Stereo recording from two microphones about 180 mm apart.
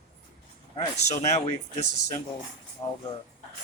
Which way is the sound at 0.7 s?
40° left (ahead or behind).